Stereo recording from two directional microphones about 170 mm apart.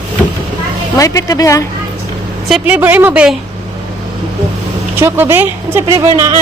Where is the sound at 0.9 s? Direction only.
20° left (ahead or behind).